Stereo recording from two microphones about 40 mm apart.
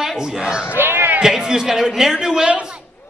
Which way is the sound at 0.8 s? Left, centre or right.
Right.